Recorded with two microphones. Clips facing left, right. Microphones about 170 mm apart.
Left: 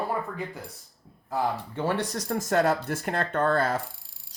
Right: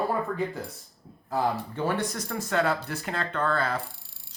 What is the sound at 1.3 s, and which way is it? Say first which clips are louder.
Speech: right 1 dB; 25° left (ahead or behind).